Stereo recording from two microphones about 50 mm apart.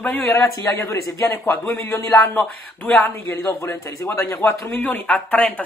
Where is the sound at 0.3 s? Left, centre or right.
Left.